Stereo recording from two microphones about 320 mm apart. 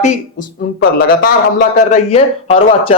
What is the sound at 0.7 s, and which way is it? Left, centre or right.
A man's voice, left.